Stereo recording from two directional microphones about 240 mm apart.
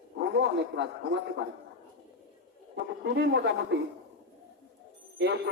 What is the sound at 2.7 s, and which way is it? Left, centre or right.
Speech, right.